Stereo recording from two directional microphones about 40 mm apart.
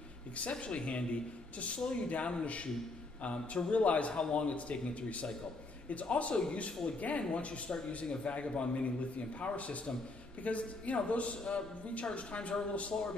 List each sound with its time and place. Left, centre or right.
0.4 s a man's voice: left